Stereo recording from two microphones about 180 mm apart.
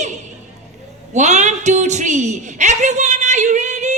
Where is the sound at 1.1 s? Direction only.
40° right (ahead or behind).